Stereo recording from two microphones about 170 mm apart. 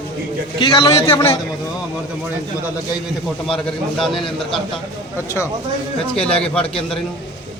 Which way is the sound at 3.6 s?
Centre (ahead or behind).